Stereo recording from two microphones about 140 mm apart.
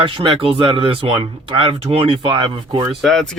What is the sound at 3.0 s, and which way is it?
Speech, centre (ahead or behind).